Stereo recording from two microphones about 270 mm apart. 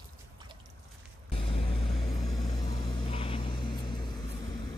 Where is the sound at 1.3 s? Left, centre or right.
Left.